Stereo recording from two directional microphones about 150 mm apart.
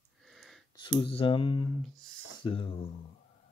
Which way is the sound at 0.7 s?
35° left (ahead or behind).